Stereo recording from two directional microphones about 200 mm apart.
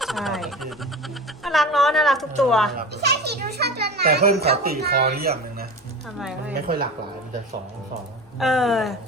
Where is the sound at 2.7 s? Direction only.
55° right (ahead or behind).